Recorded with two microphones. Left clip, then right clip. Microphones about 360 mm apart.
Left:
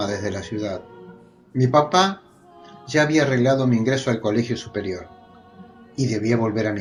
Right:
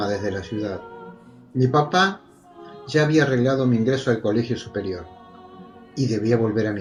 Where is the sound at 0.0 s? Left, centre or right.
Centre.